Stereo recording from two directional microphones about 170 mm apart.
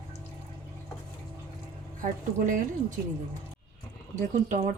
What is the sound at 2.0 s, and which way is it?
Speech, 50° right (ahead or behind).